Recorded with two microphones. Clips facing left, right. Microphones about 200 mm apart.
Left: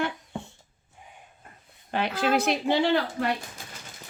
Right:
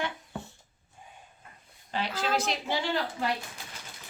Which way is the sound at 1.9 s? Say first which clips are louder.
Left 5 dB; 55° left (ahead or behind).